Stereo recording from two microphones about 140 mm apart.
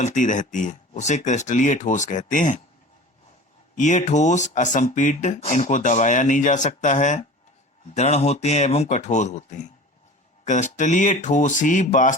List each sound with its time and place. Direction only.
0.0 s speech: 65° left (ahead or behind)
3.8 s speech: 60° left (ahead or behind)
7.9 s speech: 50° left (ahead or behind); by 12.1 s 65° left (ahead or behind)